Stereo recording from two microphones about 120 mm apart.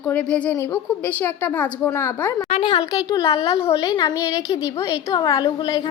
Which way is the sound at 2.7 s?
30° left (ahead or behind).